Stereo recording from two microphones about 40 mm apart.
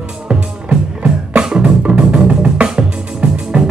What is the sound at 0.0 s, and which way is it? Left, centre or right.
Music, centre.